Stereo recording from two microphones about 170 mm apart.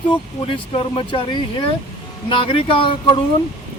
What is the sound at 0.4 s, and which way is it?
Speech, 30° left (ahead or behind).